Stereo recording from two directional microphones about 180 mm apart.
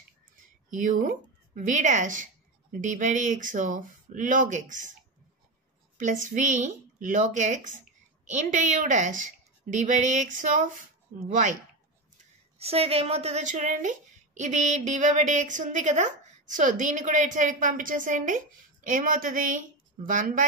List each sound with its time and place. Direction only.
0.7 s a woman's voice: 45° right (ahead or behind)
5.9 s a woman's voice: 45° right (ahead or behind)
12.5 s a woman's voice: 35° right (ahead or behind)